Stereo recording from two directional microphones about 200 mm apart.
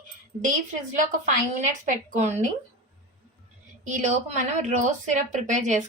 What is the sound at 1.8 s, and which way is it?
Speech, 35° right (ahead or behind).